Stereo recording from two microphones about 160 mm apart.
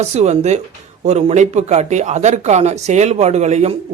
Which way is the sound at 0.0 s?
45° right (ahead or behind).